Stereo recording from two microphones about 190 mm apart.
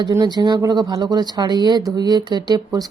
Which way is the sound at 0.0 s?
20° right (ahead or behind).